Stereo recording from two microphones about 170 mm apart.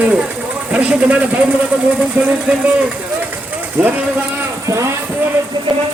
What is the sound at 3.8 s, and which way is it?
Speech, 10° right (ahead or behind).